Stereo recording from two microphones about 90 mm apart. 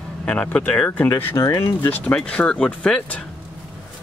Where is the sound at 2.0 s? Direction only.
15° left (ahead or behind).